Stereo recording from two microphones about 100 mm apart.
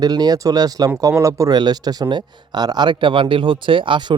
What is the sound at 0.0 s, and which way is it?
Speech, 40° right (ahead or behind).